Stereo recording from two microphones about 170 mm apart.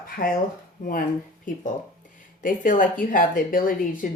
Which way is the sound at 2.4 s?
50° left (ahead or behind).